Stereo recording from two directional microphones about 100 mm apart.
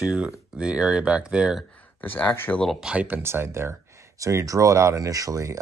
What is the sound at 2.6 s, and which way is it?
Speech, centre (ahead or behind).